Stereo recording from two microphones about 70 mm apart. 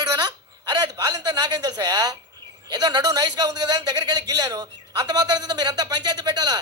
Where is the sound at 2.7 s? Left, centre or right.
Right.